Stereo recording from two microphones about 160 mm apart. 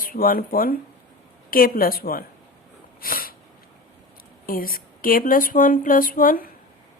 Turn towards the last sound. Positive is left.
turn(degrees=60)  # may be behind; listen again after turning